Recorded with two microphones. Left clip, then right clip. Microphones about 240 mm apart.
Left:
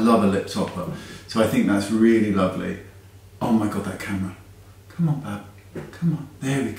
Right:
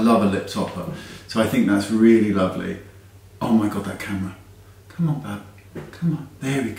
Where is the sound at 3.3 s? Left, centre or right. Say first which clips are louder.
Right 1 dB; centre.